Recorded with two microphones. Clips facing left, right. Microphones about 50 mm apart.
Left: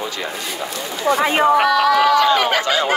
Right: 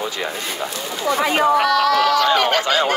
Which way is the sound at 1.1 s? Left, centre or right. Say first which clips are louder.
Left 2 dB; left.